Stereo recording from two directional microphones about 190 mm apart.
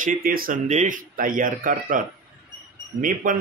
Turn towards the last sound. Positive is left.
turn(degrees=-45)  # may be behind; listen again after turning